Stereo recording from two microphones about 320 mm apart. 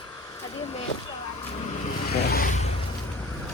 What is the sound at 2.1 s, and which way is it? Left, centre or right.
Vehicle, left.